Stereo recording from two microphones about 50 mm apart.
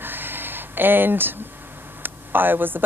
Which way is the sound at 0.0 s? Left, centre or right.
Right.